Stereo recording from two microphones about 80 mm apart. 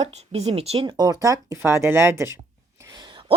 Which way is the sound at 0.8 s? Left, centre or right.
Right.